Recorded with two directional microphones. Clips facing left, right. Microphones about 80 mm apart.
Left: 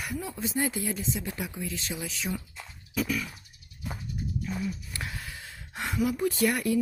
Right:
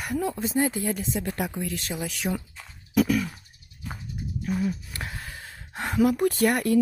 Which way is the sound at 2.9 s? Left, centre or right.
Right.